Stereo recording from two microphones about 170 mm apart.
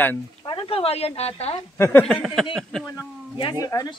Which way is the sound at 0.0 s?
10° left (ahead or behind).